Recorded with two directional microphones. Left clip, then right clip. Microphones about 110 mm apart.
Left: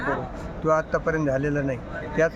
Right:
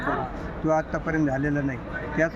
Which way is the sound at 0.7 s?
45° left (ahead or behind).